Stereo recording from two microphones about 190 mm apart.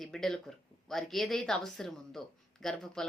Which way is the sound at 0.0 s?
Centre (ahead or behind).